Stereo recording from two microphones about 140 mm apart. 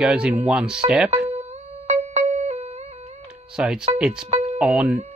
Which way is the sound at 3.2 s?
5° right (ahead or behind).